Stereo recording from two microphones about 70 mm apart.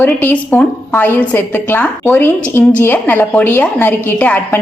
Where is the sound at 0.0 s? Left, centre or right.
Left.